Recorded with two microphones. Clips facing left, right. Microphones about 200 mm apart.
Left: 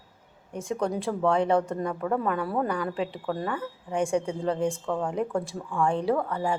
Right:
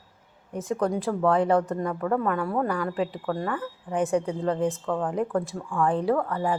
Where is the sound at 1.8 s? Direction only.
15° left (ahead or behind).